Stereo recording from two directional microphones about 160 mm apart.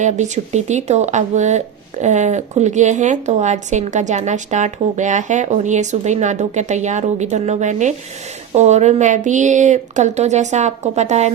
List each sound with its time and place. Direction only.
0.0 s speech: 45° right (ahead or behind)